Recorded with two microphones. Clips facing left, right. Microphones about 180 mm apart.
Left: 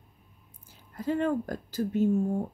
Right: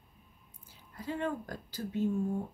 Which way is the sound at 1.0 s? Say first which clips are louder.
Left 8 dB; 45° left (ahead or behind).